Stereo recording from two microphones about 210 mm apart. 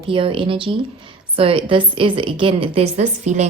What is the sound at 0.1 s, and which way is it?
Speech, 25° right (ahead or behind).